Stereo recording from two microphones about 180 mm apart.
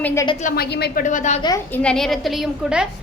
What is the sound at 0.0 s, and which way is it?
Speech, 15° left (ahead or behind).